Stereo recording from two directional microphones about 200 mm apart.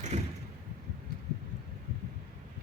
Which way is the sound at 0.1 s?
35° right (ahead or behind).